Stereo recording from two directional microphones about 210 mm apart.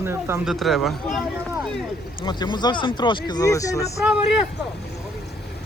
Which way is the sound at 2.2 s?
20° left (ahead or behind).